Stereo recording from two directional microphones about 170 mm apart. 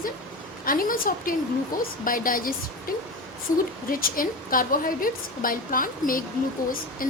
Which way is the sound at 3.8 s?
55° left (ahead or behind).